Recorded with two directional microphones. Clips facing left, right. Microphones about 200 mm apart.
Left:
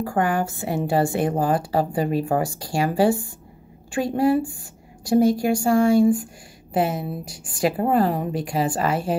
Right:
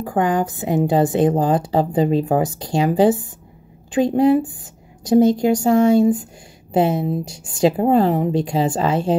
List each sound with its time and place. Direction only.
0.0 s a woman's voice: 20° right (ahead or behind)